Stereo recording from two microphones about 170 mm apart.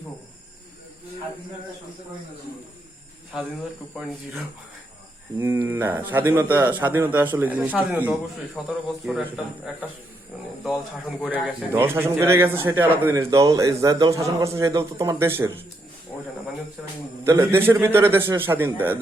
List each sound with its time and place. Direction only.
5.4 s speech: 15° right (ahead or behind)
11.2 s a man's voice: 5° right (ahead or behind)
17.2 s speech: 15° right (ahead or behind)